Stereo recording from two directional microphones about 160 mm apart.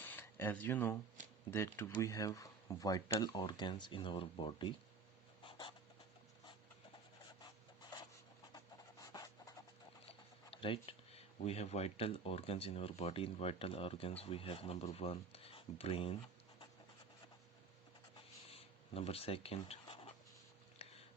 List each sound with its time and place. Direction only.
0.0 s a sound: 15° left (ahead or behind)
1.5 s speech: 15° left (ahead or behind)
5.4 s writing: 30° left (ahead or behind)
7.4 s rub: 30° left (ahead or behind)
8.5 s pant: 25° left (ahead or behind)
10.1 s speech: 35° left (ahead or behind)
18.5 s writing: 40° left (ahead or behind)